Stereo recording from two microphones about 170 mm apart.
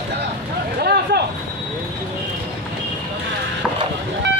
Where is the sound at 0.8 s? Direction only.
75° right (ahead or behind).